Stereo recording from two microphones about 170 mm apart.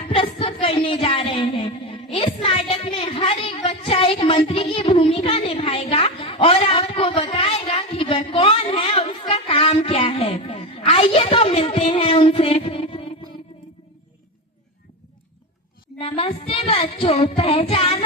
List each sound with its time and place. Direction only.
0.1 s music: 30° left (ahead or behind)
2.1 s speech: 30° left (ahead or behind)
16.0 s speech: 35° left (ahead or behind)